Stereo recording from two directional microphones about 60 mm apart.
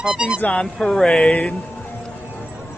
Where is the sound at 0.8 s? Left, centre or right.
Centre.